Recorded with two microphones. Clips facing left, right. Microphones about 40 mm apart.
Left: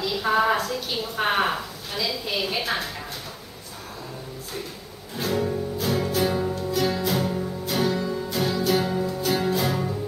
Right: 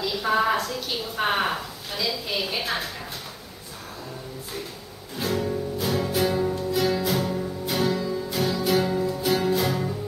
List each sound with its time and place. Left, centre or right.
0.0 s a woman's voice: centre
5.1 s music: centre
6.5 s music: centre
6.9 s music: centre
8.0 s music: centre
8.3 s music: centre